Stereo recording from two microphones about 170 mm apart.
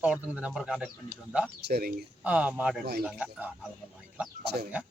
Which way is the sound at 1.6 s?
65° right (ahead or behind).